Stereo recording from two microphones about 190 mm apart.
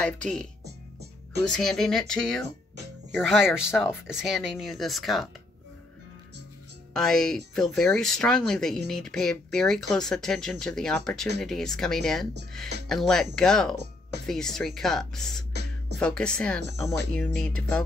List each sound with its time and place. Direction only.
0.0 s speech: 5° left (ahead or behind)
6.9 s speech: centre (ahead or behind)
15.5 s beatboxing: 60° right (ahead or behind)
16.0 s speech: 5° left (ahead or behind)